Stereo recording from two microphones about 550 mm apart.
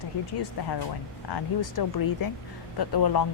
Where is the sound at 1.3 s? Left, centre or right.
Left.